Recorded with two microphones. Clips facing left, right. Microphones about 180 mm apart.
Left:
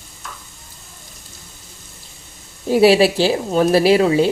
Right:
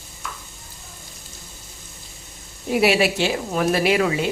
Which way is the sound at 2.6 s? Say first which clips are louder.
Left 6 dB; 30° left (ahead or behind).